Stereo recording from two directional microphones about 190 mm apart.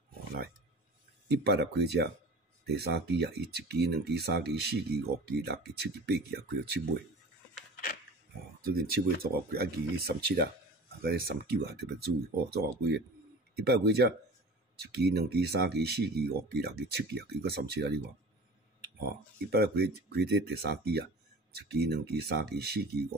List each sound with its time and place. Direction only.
1.3 s speech: 60° right (ahead or behind)
8.6 s speech: 55° right (ahead or behind)
18.9 s speech: 55° right (ahead or behind)